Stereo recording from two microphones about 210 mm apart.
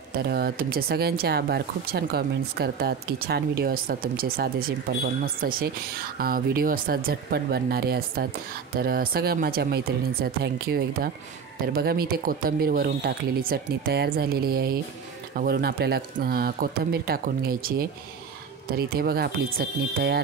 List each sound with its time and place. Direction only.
0.3 s speech: 45° right (ahead or behind)